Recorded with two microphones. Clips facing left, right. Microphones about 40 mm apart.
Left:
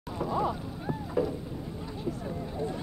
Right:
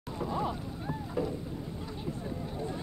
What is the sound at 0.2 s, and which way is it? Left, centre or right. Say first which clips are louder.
Boat: left 4 dB; centre.